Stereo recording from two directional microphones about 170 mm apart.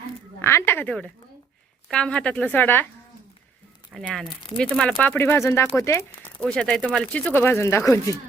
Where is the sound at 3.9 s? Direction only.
Centre (ahead or behind); by 6.3 s 15° left (ahead or behind).